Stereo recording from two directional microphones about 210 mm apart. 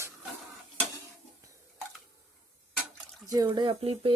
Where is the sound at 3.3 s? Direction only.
20° right (ahead or behind).